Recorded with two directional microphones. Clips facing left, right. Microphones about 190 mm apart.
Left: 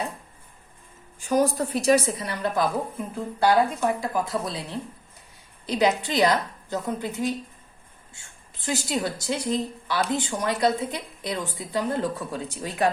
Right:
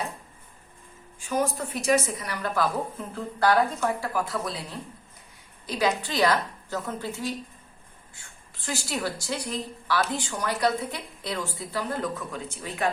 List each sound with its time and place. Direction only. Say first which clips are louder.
1.3 s a woman's voice: left 5 dB; 35° left (ahead or behind); by 4.5 s 20° left (ahead or behind)
5.6 s a woman's voice: left 4 dB; 20° left (ahead or behind)